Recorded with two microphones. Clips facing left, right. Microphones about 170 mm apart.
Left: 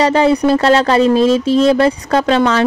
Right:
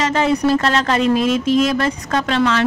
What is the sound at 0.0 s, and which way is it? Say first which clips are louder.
Speech: left 5 dB; 35° left (ahead or behind).